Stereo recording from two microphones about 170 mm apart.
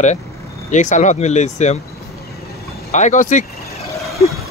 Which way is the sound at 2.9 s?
45° left (ahead or behind).